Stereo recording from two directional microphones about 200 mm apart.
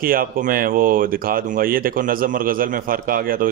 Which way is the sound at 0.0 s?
45° right (ahead or behind).